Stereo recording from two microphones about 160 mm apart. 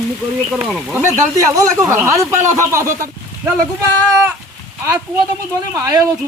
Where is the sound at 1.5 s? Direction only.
20° right (ahead or behind).